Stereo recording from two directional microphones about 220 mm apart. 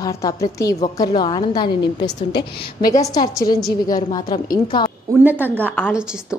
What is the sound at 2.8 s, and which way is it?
Speech, 35° left (ahead or behind).